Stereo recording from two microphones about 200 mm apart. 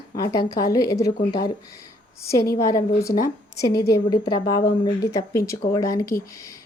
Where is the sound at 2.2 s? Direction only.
15° left (ahead or behind).